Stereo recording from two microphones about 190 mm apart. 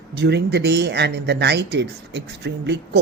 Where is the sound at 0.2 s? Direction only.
60° right (ahead or behind).